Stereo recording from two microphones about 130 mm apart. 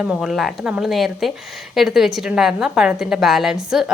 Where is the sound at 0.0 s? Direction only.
5° right (ahead or behind).